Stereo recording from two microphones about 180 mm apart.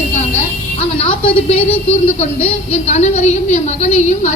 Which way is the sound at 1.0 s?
30° left (ahead or behind).